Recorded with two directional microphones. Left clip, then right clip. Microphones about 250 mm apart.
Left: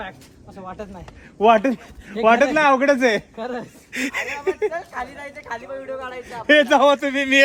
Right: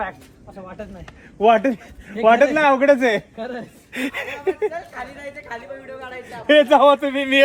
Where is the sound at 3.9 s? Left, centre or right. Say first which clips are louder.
Left 1 dB; centre.